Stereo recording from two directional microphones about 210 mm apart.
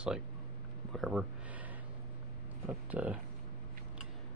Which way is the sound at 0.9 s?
Centre (ahead or behind).